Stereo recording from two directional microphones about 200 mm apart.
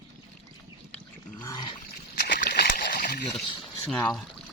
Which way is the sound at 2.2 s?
50° left (ahead or behind).